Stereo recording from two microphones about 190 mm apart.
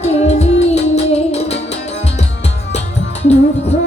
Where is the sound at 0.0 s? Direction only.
35° left (ahead or behind).